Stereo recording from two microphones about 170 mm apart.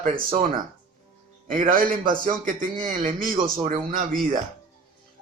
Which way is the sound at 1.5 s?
50° right (ahead or behind).